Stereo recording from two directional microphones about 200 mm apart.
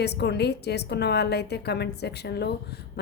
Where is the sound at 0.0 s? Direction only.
55° left (ahead or behind).